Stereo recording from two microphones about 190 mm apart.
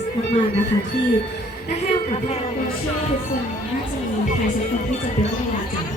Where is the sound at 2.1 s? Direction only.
35° left (ahead or behind).